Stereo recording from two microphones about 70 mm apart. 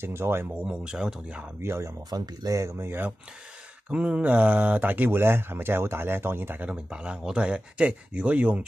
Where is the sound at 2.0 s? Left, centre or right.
Right.